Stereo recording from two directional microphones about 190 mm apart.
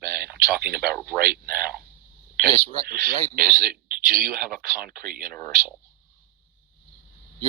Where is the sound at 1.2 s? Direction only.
50° right (ahead or behind).